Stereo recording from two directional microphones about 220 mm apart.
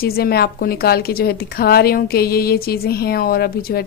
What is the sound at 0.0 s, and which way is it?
A woman's voice, 45° left (ahead or behind).